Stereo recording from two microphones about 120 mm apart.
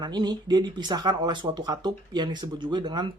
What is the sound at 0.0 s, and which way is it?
Speech, 35° right (ahead or behind).